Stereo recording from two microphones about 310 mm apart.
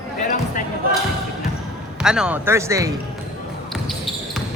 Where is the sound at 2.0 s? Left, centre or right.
Centre.